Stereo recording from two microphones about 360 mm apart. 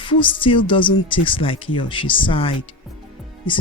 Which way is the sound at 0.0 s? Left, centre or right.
Centre.